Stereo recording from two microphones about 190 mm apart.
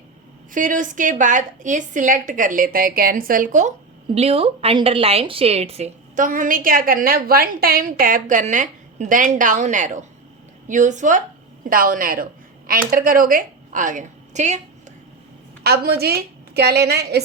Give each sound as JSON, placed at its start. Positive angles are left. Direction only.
{"t": 0.5, "sound": "a woman's voice", "side_deg": -45}
{"t": 4.1, "sound": "a woman's voice", "side_deg": -30}
{"t": 15.6, "sound": "a woman's voice", "side_deg": -55}